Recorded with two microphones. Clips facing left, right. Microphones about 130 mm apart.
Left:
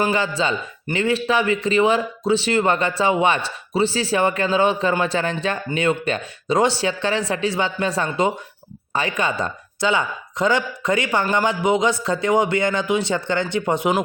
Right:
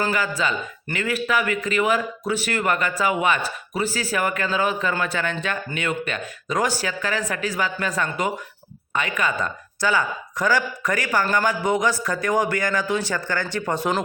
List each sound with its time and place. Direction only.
0.0 s speech: 25° left (ahead or behind)